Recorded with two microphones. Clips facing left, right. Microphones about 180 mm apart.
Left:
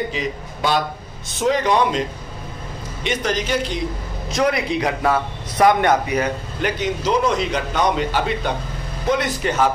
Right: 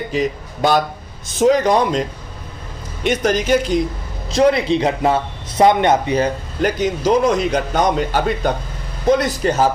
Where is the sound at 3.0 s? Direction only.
50° right (ahead or behind).